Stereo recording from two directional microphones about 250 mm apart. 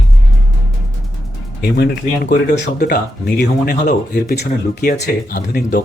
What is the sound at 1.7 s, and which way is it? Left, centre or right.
Speech, left.